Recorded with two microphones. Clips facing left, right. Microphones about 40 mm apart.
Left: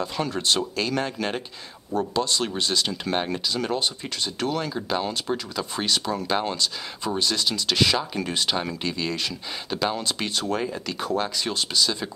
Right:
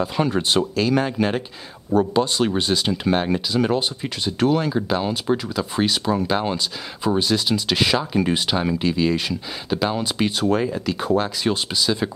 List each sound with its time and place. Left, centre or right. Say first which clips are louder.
0.3 s speech: right 4 dB; centre
0.7 s speech: right 6 dB; centre
1.9 s speech: right 6 dB; centre